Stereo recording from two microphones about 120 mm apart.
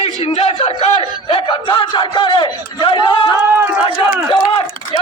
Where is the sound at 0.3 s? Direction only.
55° left (ahead or behind).